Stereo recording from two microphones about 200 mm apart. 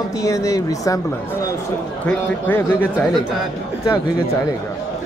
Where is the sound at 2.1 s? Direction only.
10° left (ahead or behind).